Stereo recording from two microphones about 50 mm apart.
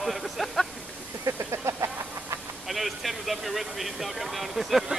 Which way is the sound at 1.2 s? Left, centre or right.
Right.